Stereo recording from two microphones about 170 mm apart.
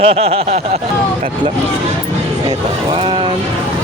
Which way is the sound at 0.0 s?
35° right (ahead or behind).